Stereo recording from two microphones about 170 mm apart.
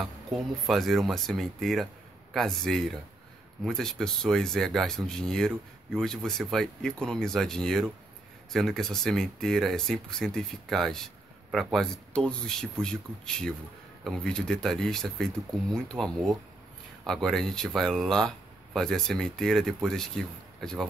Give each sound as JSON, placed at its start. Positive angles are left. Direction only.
{"t": 0.7, "sound": "speech", "side_deg": 0}